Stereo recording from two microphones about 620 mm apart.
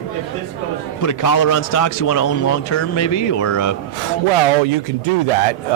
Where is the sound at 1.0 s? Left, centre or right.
Left.